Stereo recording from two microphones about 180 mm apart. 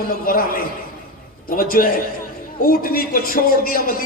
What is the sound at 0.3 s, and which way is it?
A man's voice, 55° left (ahead or behind).